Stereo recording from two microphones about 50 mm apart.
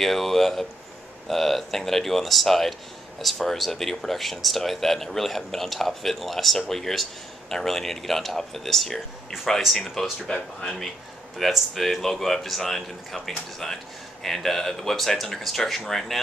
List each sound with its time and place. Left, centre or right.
0.0 s speech: centre
10.2 s speech: centre
11.3 s speech: centre